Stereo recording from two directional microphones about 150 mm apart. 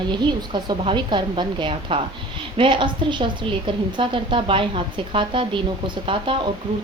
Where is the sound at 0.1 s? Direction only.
30° right (ahead or behind).